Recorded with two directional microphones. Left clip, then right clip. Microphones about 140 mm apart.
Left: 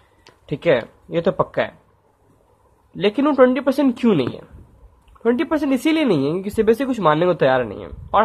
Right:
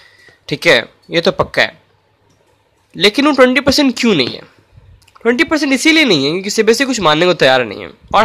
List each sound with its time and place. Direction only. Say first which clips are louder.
0.5 s speech: right 7 dB; 25° right (ahead or behind)
3.0 s speech: right 6 dB; 30° right (ahead or behind)